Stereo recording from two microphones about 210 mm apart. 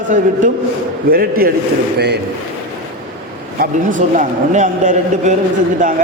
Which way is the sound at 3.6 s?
40° right (ahead or behind).